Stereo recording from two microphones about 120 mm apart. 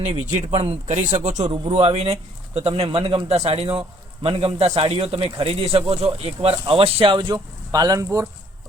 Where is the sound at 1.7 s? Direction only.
60° right (ahead or behind).